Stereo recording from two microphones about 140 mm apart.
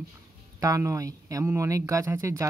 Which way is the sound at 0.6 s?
25° right (ahead or behind).